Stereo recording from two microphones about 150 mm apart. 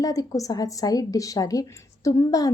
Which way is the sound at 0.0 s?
25° left (ahead or behind).